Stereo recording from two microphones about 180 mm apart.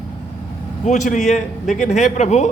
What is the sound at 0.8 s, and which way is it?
A man's voice, 40° left (ahead or behind).